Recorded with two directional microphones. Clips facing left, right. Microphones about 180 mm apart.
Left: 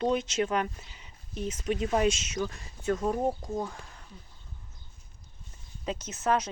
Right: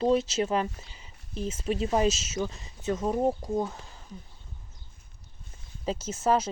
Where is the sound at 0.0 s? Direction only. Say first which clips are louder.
Right 3 dB; 30° right (ahead or behind).